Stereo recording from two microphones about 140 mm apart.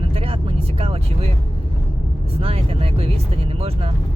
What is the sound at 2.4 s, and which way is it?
Speech, 45° right (ahead or behind).